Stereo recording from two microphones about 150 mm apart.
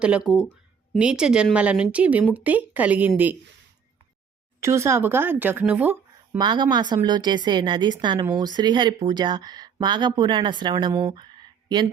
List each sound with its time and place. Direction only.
0.0 s speech: 5° right (ahead or behind)
4.6 s speech: 20° right (ahead or behind)
6.3 s a woman's voice: 30° right (ahead or behind)